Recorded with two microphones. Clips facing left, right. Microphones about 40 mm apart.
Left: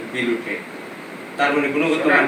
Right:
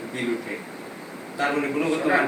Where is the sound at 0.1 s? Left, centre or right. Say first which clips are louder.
Left 6 dB; left.